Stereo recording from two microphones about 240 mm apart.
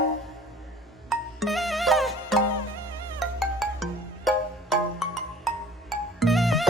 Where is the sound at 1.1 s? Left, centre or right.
Centre.